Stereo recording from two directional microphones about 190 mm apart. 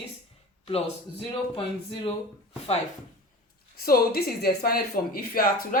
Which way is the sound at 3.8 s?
50° left (ahead or behind).